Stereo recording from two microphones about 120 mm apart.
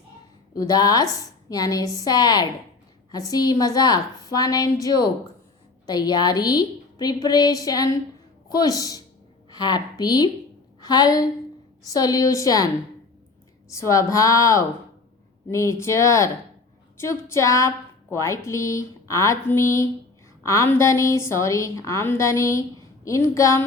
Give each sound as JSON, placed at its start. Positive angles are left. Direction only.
{"t": 0.6, "sound": "a woman's voice", "side_deg": 35}
{"t": 13.7, "sound": "a woman's voice", "side_deg": 25}